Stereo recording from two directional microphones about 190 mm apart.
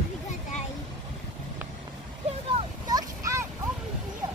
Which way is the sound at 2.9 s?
20° right (ahead or behind).